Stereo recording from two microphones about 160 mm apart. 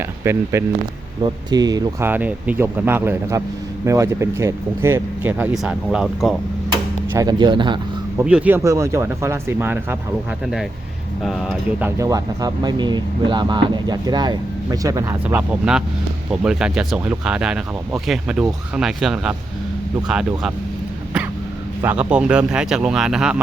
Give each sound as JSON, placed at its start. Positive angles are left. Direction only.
{"t": 0.2, "sound": "speech", "side_deg": -15}
{"t": 2.0, "sound": "speech", "side_deg": -10}
{"t": 7.1, "sound": "speech", "side_deg": -25}
{"t": 8.2, "sound": "speech", "side_deg": -5}
{"t": 10.4, "sound": "speech", "side_deg": 0}
{"t": 11.9, "sound": "speech", "side_deg": -20}
{"t": 21.8, "sound": "speech", "side_deg": -10}